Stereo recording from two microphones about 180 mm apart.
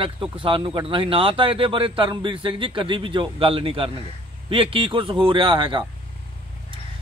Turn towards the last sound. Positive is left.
turn(degrees=-30)  # may be behind; listen again after turning